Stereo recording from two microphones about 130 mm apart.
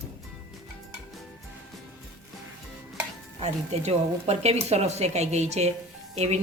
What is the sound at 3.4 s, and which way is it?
Speech, 55° right (ahead or behind).